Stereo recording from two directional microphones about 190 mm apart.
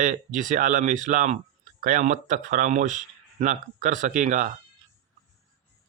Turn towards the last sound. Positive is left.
turn(degrees=-40)  # may be behind; listen again after turning